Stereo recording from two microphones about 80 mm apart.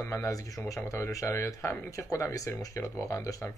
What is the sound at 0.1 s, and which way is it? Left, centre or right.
Speech, left.